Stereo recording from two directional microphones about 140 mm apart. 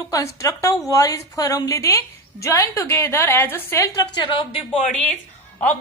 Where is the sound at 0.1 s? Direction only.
20° left (ahead or behind).